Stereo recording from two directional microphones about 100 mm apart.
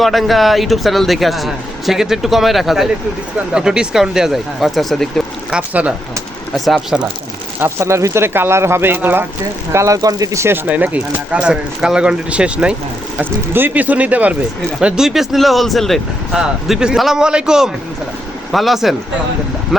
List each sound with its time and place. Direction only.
0.0 s speech: centre (ahead or behind)
5.5 s speech: 10° right (ahead or behind)
6.5 s speech: centre (ahead or behind)
7.6 s speech: 25° right (ahead or behind)
9.7 s speech: 35° right (ahead or behind); by 18.9 s centre (ahead or behind)